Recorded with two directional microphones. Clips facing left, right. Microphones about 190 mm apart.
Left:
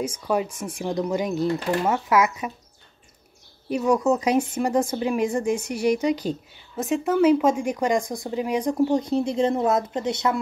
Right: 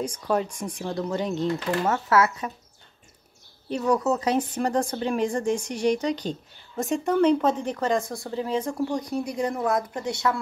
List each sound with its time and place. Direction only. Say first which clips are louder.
0.0 s speech: left 1 dB; 5° left (ahead or behind)
3.6 s speech: left 3 dB; 10° left (ahead or behind)